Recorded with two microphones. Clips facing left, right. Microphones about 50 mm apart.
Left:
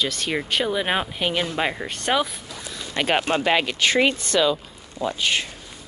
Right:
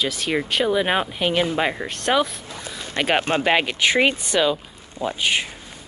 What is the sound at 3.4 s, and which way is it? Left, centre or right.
Speech, centre.